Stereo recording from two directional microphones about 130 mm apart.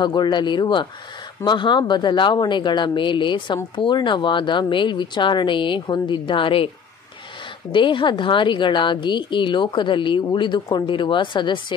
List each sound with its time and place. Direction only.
0.0 s speech: 35° left (ahead or behind)
7.7 s speech: 40° left (ahead or behind)